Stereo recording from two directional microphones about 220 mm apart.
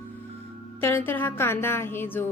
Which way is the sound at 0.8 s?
10° left (ahead or behind).